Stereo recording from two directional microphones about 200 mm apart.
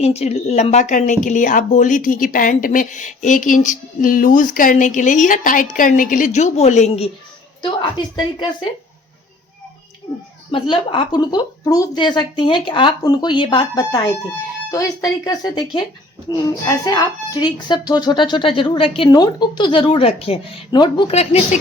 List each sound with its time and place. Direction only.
0.0 s speech: 30° left (ahead or behind)
10.5 s speech: 25° left (ahead or behind)